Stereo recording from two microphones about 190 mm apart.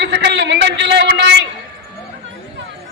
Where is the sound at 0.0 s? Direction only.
65° right (ahead or behind).